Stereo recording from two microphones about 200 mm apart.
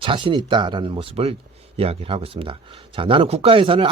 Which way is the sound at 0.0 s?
25° right (ahead or behind).